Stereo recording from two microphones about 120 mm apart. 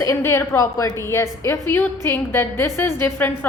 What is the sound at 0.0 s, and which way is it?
A woman's voice, 25° left (ahead or behind).